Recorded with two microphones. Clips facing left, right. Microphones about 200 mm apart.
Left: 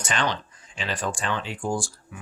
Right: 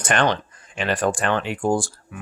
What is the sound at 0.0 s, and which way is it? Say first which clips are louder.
Speech: right 6 dB; 55° right (ahead or behind).